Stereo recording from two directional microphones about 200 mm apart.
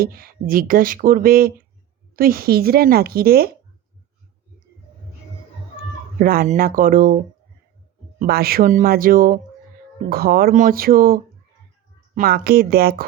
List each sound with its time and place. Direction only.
0.0 s speech: 45° right (ahead or behind)
6.1 s speech: 45° right (ahead or behind)
8.2 s speech: 50° right (ahead or behind)